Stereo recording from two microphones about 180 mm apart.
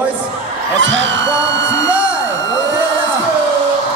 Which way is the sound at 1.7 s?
20° left (ahead or behind).